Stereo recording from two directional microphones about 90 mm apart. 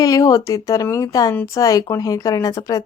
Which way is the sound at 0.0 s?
45° left (ahead or behind).